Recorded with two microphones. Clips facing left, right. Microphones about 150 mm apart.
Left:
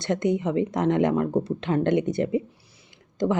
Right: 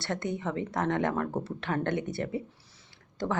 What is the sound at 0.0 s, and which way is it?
Speech, 20° left (ahead or behind).